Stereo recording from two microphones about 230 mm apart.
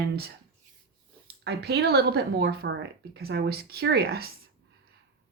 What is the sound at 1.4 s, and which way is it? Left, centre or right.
Speech, right.